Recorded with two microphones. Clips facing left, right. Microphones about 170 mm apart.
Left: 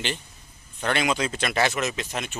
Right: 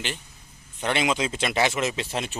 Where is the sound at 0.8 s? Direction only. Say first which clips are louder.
Even; 20° right (ahead or behind).